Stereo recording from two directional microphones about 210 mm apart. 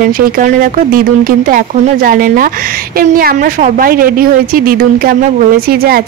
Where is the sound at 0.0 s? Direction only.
45° right (ahead or behind).